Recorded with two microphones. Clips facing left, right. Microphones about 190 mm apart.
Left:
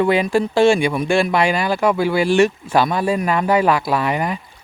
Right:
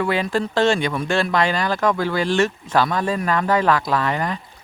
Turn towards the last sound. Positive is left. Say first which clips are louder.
# left 2 dB
turn(degrees=10)  # may be behind; listen again after turning